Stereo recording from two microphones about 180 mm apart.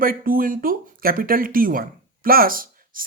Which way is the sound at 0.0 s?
55° right (ahead or behind).